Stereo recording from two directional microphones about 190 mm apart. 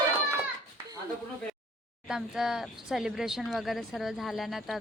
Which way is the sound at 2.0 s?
5° right (ahead or behind).